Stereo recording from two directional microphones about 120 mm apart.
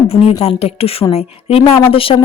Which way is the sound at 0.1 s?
55° left (ahead or behind).